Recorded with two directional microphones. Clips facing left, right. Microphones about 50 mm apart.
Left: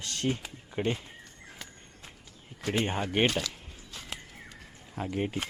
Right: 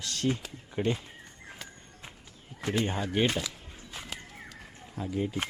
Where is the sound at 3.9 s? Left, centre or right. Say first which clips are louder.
Right 3 dB; right.